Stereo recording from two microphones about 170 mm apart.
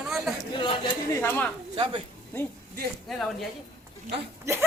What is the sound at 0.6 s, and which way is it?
Speech, 30° left (ahead or behind).